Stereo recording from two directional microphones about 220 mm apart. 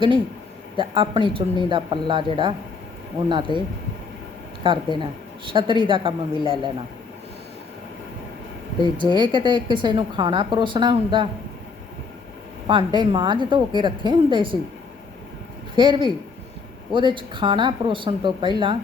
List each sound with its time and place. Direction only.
0.8 s a woman's voice: 25° right (ahead or behind)
4.6 s a woman's voice: 20° right (ahead or behind)
9.1 s a woman's voice: 20° right (ahead or behind)
12.6 s a woman's voice: 20° right (ahead or behind)
15.7 s a woman's voice: 20° right (ahead or behind)